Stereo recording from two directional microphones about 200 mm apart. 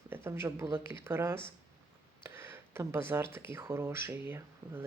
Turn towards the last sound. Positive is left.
turn(degrees=-10)  # may be behind; listen again after turning